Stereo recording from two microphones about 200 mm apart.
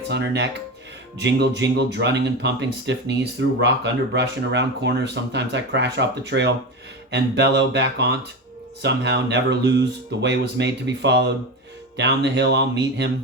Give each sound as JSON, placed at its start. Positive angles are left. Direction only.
{"t": 0.1, "sound": "speech", "side_deg": -60}